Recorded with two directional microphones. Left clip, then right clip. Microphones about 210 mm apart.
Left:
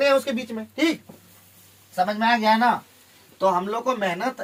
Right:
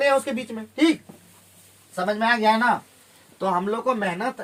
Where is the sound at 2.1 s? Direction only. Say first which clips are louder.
Right 2 dB; 10° right (ahead or behind).